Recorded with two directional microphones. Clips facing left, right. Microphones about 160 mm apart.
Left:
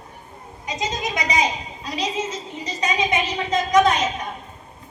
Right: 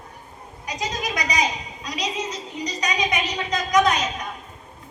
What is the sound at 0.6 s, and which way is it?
A woman's voice, 20° left (ahead or behind).